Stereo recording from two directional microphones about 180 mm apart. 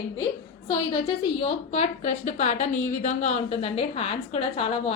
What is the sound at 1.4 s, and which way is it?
A woman's voice, 35° left (ahead or behind).